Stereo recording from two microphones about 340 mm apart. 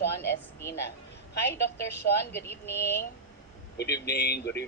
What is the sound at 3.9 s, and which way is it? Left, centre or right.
Speech, left.